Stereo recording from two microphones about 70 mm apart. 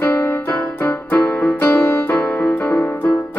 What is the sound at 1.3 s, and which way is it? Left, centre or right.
Music, centre.